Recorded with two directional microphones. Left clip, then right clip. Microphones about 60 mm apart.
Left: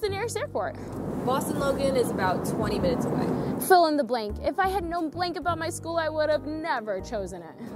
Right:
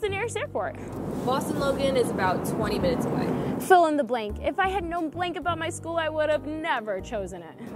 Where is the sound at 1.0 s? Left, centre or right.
Centre.